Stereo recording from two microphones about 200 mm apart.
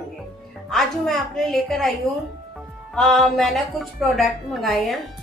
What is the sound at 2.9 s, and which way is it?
A woman's voice, 5° left (ahead or behind).